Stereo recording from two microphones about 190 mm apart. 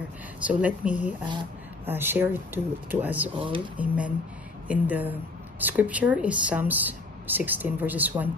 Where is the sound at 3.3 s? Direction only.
25° right (ahead or behind).